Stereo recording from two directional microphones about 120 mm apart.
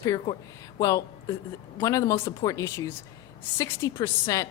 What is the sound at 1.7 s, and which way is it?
Speech, 25° left (ahead or behind).